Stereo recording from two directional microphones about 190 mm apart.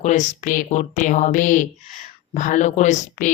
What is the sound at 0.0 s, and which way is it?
Speech, 40° left (ahead or behind).